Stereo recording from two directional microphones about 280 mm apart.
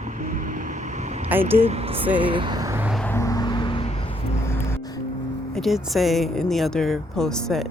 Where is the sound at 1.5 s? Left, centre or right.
Right.